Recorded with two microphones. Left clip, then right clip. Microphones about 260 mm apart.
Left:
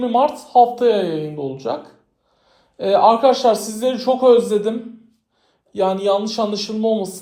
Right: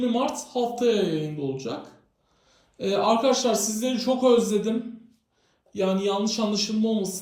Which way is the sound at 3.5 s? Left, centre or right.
Centre.